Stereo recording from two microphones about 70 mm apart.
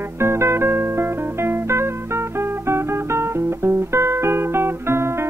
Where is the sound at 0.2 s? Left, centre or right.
Right.